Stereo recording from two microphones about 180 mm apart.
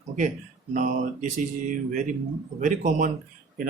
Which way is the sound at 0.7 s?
45° right (ahead or behind).